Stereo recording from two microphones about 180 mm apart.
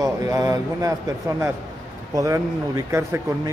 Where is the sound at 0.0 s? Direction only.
20° right (ahead or behind).